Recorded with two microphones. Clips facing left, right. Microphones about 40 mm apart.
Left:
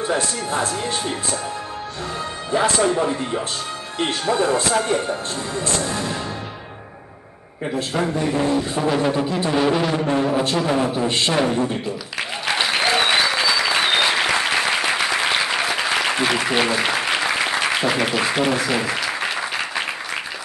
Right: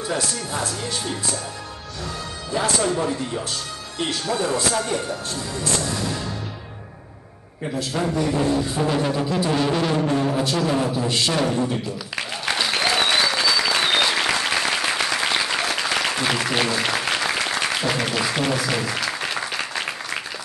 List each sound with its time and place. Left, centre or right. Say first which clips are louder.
0.2 s speech: left 4 dB; left
2.5 s a man's voice: left 4 dB; left
7.6 s a man's voice: left 2 dB; centre
8.8 s music: left 2 dB; centre
10.9 s speech: left 2 dB; left
11.3 s a man's voice: left 2 dB; centre
12.2 s applause: left 2 dB; centre
18.7 s a man's voice: left 3 dB; centre
18.9 s applause: left 2 dB; centre